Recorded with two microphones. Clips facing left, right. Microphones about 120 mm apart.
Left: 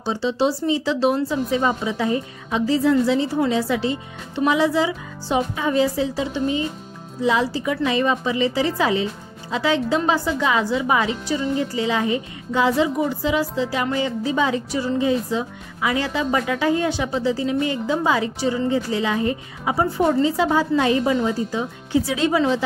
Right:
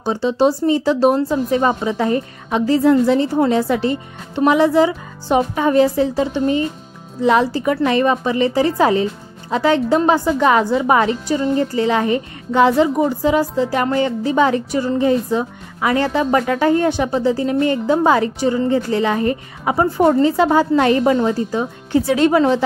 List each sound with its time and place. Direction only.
0.0 s speech: 50° right (ahead or behind)